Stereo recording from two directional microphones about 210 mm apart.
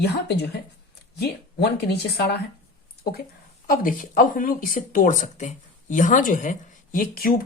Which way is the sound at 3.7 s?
40° left (ahead or behind).